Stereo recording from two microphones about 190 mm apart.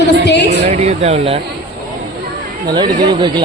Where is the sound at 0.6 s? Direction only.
35° right (ahead or behind).